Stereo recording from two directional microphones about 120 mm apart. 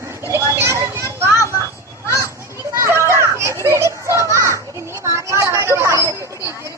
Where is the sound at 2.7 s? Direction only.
20° right (ahead or behind).